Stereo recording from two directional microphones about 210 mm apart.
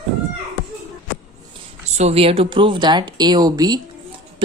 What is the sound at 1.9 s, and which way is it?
A woman's voice, 30° right (ahead or behind).